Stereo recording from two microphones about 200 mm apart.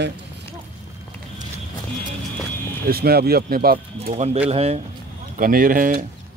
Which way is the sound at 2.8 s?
50° right (ahead or behind).